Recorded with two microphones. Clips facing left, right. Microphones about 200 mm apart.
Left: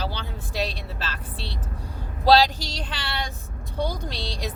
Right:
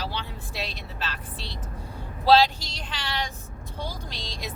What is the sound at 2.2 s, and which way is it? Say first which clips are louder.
Speech: left 1 dB; 35° left (ahead or behind).